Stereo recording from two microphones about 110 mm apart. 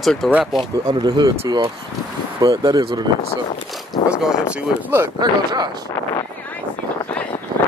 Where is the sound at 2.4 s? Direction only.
35° right (ahead or behind).